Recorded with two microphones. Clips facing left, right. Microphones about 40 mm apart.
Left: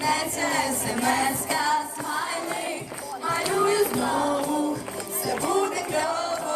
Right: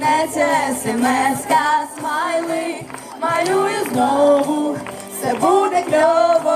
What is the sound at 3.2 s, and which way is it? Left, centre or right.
Run, right.